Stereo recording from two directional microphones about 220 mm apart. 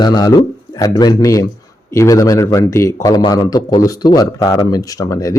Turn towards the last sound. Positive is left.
turn(degrees=15)  # may be behind; listen again after turning